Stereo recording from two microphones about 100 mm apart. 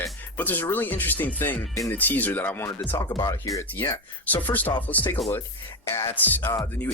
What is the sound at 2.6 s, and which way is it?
Speech, 40° left (ahead or behind).